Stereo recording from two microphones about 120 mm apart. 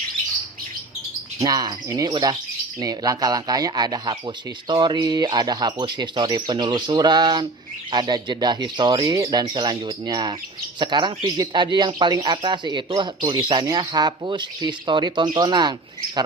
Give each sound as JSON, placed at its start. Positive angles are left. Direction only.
{"t": 1.5, "sound": "speech", "side_deg": -30}